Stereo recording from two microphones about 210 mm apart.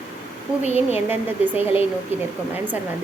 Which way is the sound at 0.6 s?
30° left (ahead or behind).